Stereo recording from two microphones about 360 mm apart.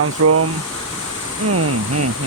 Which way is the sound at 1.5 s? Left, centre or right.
Right.